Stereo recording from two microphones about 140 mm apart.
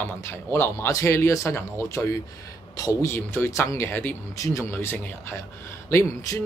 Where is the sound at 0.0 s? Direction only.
15° left (ahead or behind).